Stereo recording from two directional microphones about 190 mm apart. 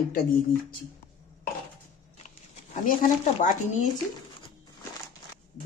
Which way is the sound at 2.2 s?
40° left (ahead or behind).